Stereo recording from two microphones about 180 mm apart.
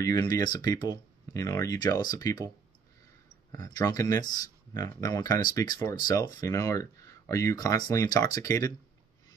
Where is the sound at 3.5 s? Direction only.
20° left (ahead or behind).